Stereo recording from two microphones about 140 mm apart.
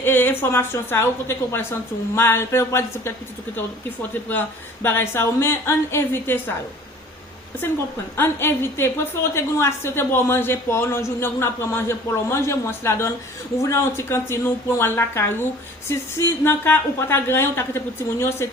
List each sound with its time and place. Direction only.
0.0 s a man's voice: 15° left (ahead or behind)
4.3 s a man's voice: 15° left (ahead or behind)
8.1 s a man's voice: 15° left (ahead or behind)